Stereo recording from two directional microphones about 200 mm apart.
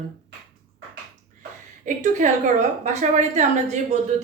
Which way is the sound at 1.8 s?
35° right (ahead or behind).